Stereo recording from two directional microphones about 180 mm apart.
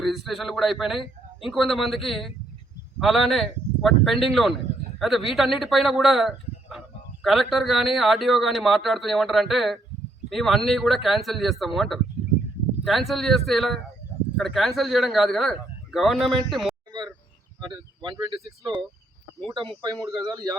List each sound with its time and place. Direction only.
0.0 s speech: centre (ahead or behind)
18.3 s speech: centre (ahead or behind)
19.8 s speech: 20° right (ahead or behind)